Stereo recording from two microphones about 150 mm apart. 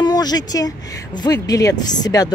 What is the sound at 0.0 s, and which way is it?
Speech, 25° left (ahead or behind).